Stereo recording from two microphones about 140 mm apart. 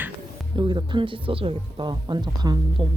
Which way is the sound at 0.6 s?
30° right (ahead or behind).